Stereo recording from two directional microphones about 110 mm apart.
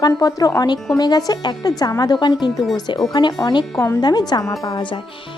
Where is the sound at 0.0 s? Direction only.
35° left (ahead or behind).